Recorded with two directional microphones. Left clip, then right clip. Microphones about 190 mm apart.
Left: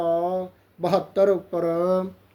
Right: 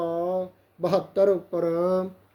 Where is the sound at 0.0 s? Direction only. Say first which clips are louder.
Left 3 dB; 10° left (ahead or behind).